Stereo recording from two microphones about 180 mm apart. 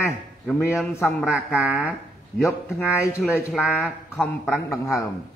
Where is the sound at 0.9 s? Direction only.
15° left (ahead or behind).